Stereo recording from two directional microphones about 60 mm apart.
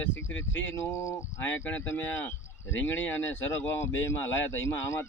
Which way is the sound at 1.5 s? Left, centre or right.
Left.